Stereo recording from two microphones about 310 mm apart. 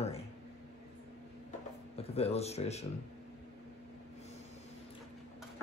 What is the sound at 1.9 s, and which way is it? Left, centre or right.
Speech, centre.